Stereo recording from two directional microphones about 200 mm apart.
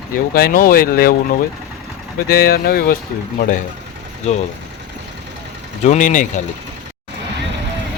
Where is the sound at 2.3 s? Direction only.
50° left (ahead or behind).